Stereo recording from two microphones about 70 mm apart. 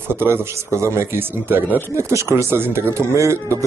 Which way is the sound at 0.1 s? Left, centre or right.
Right.